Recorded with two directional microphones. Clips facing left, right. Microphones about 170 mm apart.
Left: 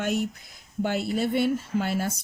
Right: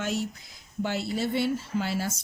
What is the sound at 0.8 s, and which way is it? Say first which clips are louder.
A man's voice: left 3 dB; 50° left (ahead or behind).